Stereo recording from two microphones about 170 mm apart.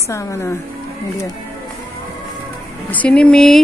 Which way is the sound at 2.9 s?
10° left (ahead or behind).